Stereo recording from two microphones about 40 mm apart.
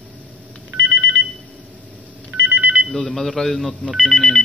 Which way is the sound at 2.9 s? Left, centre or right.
Centre.